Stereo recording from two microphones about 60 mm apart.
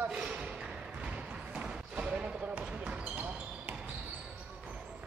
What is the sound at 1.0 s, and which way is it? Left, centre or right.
Basketball bounce, right.